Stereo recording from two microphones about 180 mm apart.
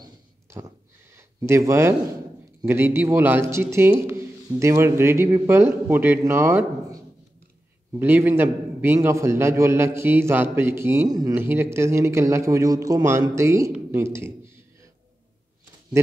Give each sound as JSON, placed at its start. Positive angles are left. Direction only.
{"t": 0.0, "sound": "a sound", "side_deg": -20}
{"t": 2.6, "sound": "a man's voice", "side_deg": -15}
{"t": 8.0, "sound": "a man's voice", "side_deg": -10}